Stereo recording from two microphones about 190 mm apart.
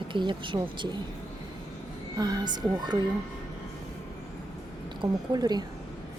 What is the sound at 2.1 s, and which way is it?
Speech, 20° right (ahead or behind).